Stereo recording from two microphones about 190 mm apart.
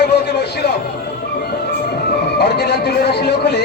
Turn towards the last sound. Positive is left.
turn(degrees=60)  # may be behind; listen again after turning